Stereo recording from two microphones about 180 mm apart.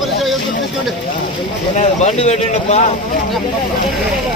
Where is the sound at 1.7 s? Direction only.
35° left (ahead or behind).